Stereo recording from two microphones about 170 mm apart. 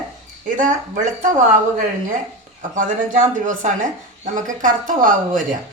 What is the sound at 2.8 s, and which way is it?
Speech, 50° right (ahead or behind).